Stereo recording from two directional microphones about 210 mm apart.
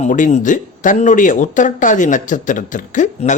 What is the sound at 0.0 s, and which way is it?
Speech, 35° left (ahead or behind).